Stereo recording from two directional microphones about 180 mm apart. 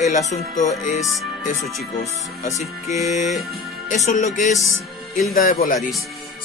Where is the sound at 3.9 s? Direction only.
40° left (ahead or behind).